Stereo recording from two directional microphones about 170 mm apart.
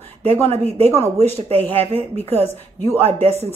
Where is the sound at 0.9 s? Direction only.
40° right (ahead or behind).